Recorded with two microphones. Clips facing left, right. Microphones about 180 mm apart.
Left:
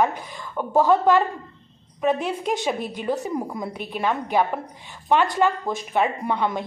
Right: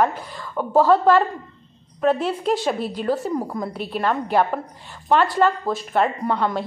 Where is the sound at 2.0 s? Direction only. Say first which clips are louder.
Right 3 dB; 15° left (ahead or behind).